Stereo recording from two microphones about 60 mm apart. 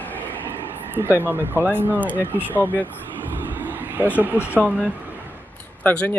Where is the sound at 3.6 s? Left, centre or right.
Right.